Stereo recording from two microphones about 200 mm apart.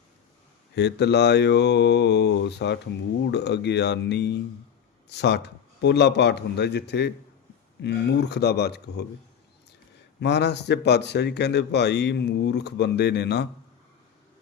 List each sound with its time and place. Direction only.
0.8 s speech: 60° left (ahead or behind)
10.2 s speech: 60° left (ahead or behind)